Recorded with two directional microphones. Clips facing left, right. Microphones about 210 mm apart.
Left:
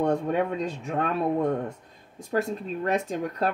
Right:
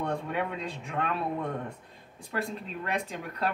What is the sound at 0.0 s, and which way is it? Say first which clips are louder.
Speech: left 7 dB; 45° left (ahead or behind).